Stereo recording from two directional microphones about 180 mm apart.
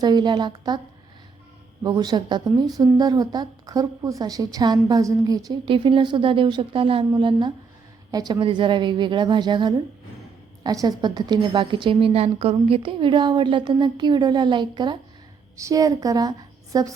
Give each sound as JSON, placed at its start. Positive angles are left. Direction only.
{"t": 0.0, "sound": "a woman's voice", "side_deg": -25}
{"t": 1.8, "sound": "a woman's voice", "side_deg": -25}